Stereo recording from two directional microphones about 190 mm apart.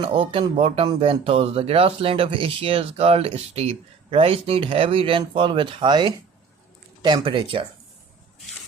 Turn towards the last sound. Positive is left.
turn(degrees=-25)  # may be behind; listen again after turning